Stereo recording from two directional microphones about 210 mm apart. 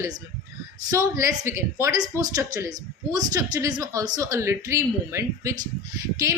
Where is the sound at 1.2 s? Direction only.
15° right (ahead or behind).